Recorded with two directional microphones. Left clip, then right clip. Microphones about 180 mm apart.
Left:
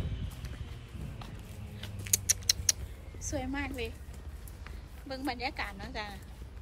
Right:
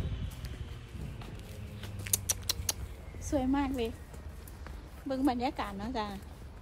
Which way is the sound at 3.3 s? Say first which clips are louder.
Right 6 dB; 15° right (ahead or behind).